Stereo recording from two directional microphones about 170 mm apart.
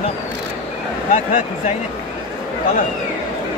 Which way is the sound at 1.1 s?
40° left (ahead or behind).